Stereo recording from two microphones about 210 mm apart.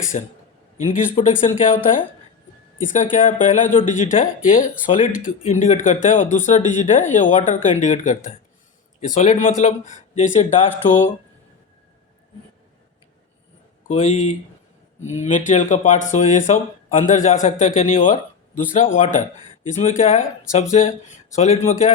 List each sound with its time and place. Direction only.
0.1 s speech: 35° left (ahead or behind)
13.8 s speech: 35° left (ahead or behind)